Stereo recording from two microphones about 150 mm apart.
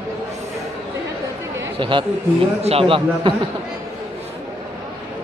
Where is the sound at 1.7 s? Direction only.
35° right (ahead or behind).